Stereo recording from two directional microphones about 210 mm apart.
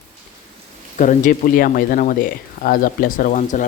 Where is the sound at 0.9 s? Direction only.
35° left (ahead or behind).